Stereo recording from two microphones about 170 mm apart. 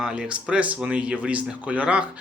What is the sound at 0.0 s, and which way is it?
Speech, 5° right (ahead or behind).